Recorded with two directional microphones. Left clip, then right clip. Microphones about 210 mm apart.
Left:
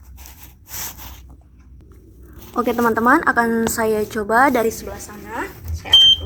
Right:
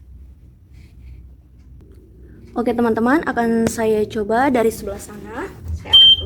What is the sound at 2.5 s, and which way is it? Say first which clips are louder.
A woman's voice: left 1 dB; 20° right (ahead or behind).